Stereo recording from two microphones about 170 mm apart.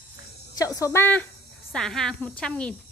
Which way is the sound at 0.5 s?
20° left (ahead or behind).